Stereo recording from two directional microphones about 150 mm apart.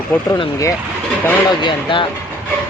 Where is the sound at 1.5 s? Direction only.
30° left (ahead or behind).